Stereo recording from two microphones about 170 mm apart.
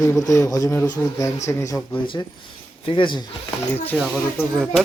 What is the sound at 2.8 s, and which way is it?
Speech, 30° left (ahead or behind).